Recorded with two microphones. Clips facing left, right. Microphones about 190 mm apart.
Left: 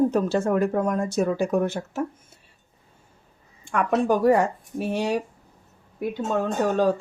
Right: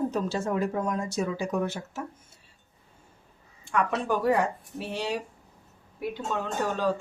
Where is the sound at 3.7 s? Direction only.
50° left (ahead or behind).